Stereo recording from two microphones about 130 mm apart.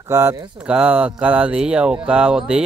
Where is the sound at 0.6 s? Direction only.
10° right (ahead or behind).